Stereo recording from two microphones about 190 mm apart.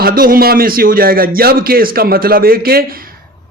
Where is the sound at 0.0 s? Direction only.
50° right (ahead or behind).